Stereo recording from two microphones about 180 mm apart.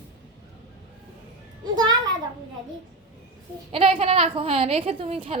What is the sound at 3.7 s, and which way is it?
A woman's voice, 30° right (ahead or behind).